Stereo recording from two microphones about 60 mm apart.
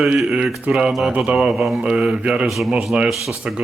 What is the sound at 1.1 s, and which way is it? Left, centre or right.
Mantra, centre.